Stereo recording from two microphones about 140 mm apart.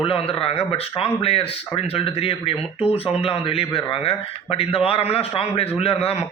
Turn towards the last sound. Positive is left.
turn(degrees=45)  # may be behind; listen again after turning